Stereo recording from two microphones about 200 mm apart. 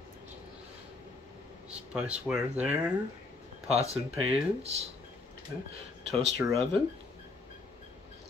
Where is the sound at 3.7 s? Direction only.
30° right (ahead or behind).